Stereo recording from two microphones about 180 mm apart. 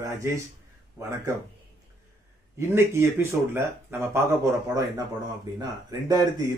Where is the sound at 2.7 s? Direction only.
15° right (ahead or behind).